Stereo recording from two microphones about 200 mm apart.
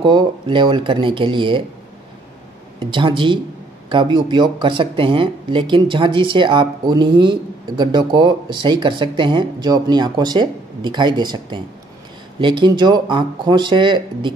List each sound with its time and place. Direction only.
0.0 s speech: 25° right (ahead or behind)
2.8 s speech: 25° right (ahead or behind)